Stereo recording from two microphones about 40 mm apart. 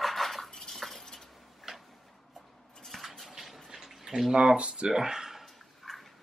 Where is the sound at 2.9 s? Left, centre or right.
Centre.